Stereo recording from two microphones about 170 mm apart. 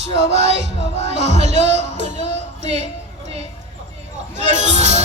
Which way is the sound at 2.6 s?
40° right (ahead or behind).